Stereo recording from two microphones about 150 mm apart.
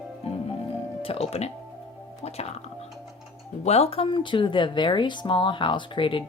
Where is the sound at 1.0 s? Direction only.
40° left (ahead or behind).